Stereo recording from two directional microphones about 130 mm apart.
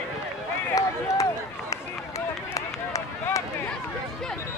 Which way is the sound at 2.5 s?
25° left (ahead or behind).